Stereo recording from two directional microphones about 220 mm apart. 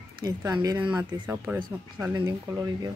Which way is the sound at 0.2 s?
15° right (ahead or behind).